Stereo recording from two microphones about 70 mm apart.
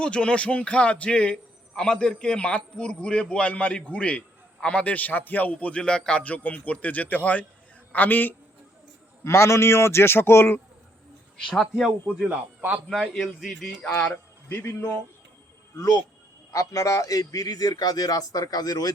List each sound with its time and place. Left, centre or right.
0.0 s a man's voice: centre
9.2 s a man's voice: left
11.4 s speech: centre
12.9 s speech: centre
14.5 s a man's voice: left
16.5 s a man's voice: left